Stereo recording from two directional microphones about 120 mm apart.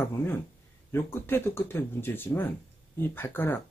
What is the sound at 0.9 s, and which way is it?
Speech, 20° left (ahead or behind).